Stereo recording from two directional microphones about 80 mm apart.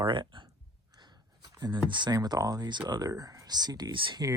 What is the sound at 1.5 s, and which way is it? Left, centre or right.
Speech, right.